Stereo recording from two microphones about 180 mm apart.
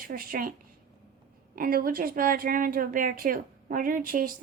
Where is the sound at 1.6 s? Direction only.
55° right (ahead or behind).